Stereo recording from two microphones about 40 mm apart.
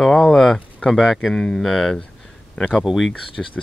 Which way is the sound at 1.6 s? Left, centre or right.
Centre.